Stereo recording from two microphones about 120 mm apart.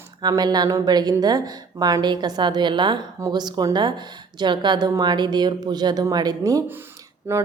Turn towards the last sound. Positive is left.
turn(degrees=-20)  # may be behind; listen again after turning